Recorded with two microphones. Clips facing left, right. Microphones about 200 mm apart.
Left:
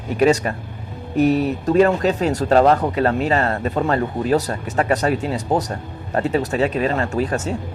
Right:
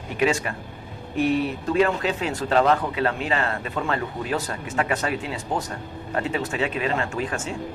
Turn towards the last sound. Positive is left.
turn(degrees=40)  # may be behind; listen again after turning